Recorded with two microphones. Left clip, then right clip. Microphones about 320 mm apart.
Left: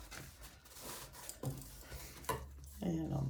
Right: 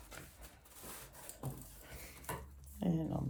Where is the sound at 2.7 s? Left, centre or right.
Right.